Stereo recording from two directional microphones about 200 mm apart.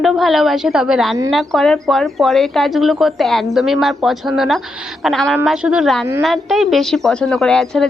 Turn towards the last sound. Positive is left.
turn(degrees=0)  # may be behind; listen again after turning